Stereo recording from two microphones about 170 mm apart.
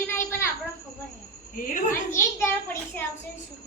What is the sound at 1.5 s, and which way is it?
Speech, 50° left (ahead or behind).